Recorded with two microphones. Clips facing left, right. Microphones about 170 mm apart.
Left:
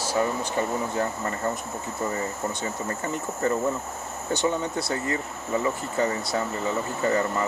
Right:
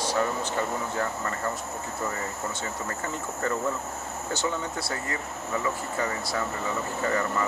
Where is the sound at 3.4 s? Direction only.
20° left (ahead or behind).